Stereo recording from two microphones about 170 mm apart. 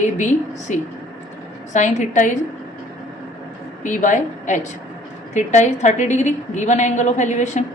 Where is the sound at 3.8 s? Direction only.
45° left (ahead or behind).